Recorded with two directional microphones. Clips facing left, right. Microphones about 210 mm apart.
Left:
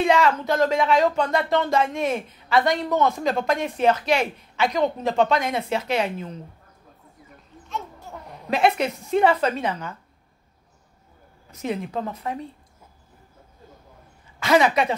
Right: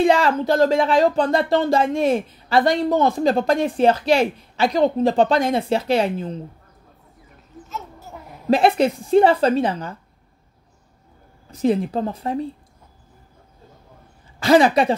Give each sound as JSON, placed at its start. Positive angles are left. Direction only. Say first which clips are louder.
{"t": 0.0, "sound": "speech", "louder": "right 3 dB", "side_deg": -35}
{"t": 7.6, "sound": "a sound", "louder": "left 1 dB", "side_deg": -5}
{"t": 8.5, "sound": "speech", "louder": "right 5 dB", "side_deg": -35}
{"t": 11.5, "sound": "speech", "louder": "right 8 dB", "side_deg": -35}
{"t": 14.4, "sound": "speech", "louder": "right 4 dB", "side_deg": -35}